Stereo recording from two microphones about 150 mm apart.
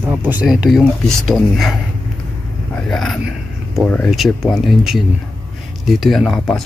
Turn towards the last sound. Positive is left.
turn(degrees=0)  # may be behind; listen again after turning